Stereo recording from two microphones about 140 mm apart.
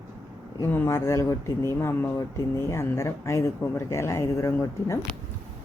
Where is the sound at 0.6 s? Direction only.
15° left (ahead or behind).